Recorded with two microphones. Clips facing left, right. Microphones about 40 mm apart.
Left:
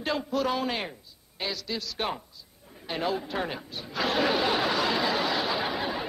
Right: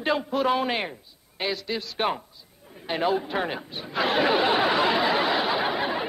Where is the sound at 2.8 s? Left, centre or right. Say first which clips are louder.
Right 5 dB; centre.